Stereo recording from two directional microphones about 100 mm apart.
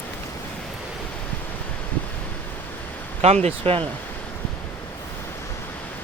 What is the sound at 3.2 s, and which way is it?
Speech, 90° right.